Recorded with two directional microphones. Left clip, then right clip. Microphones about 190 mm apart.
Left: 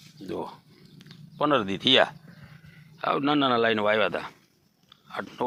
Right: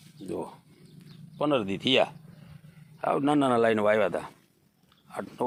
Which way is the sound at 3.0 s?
Centre (ahead or behind).